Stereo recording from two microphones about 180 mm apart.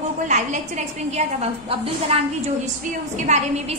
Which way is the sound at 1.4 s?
35° right (ahead or behind).